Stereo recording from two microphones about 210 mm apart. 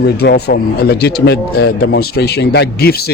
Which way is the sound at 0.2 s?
50° left (ahead or behind).